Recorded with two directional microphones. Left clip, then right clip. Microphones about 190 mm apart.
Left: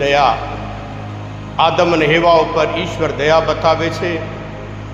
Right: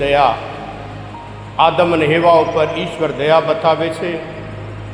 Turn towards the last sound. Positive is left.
turn(degrees=30)  # may be behind; listen again after turning